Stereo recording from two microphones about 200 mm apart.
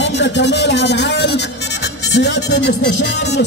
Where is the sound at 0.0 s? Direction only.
60° left (ahead or behind).